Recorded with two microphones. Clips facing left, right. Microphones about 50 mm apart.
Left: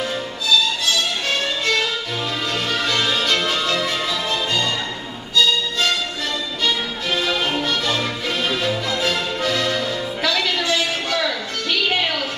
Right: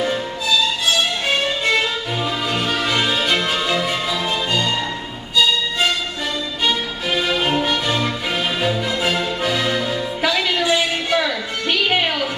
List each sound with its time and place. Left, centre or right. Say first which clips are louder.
2.5 s music: right 1 dB; centre
6.6 s music: right 2 dB; centre